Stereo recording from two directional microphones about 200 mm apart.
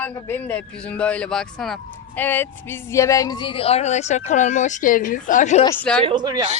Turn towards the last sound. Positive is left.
turn(degrees=-20)  # may be behind; listen again after turning